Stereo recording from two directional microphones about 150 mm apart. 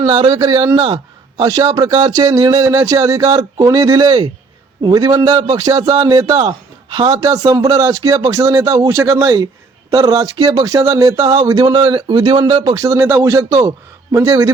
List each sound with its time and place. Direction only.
0.0 s speech: 30° right (ahead or behind)